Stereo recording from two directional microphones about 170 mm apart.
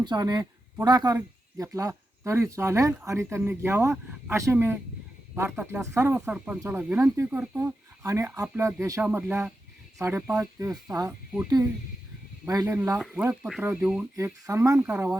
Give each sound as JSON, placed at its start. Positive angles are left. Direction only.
{"t": 0.0, "sound": "speech", "side_deg": -25}
{"t": 13.0, "sound": "speech", "side_deg": -10}
{"t": 14.4, "sound": "speech", "side_deg": -20}